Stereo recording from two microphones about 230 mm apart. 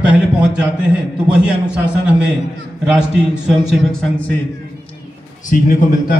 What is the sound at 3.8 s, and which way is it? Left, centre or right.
Speech, centre.